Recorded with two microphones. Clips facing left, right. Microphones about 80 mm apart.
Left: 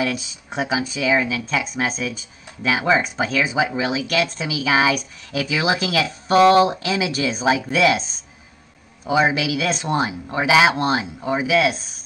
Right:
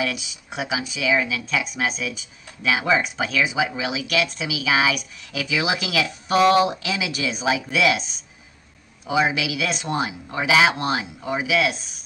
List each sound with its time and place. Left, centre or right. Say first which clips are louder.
0.0 s speech: left 3 dB; left